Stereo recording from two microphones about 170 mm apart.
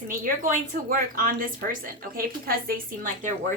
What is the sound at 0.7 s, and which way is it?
A woman's voice, 55° right (ahead or behind).